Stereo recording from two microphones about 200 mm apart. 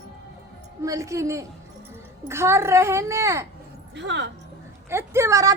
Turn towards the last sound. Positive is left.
turn(degrees=-15)  # may be behind; listen again after turning